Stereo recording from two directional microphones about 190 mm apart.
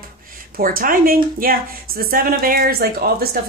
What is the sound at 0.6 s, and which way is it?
Speech, 50° right (ahead or behind).